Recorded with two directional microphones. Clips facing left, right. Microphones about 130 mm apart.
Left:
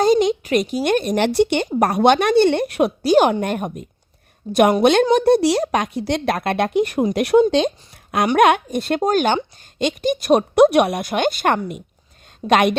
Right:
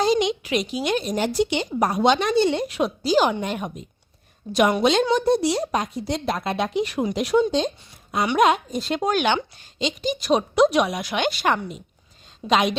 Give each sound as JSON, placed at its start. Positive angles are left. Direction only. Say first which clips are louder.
{"t": 0.0, "sound": "a sound", "louder": "left 5 dB", "side_deg": 45}
{"t": 0.9, "sound": "a woman's voice", "louder": "left 5 dB", "side_deg": 55}
{"t": 4.4, "sound": "a woman's voice", "louder": "left 5 dB", "side_deg": 35}
{"t": 4.8, "sound": "a woman's voice", "louder": "left 5 dB", "side_deg": 60}
{"t": 8.4, "sound": "a woman's voice", "louder": "left 4 dB", "side_deg": 70}
{"t": 9.0, "sound": "a woman's voice", "louder": "left 3 dB", "side_deg": 45}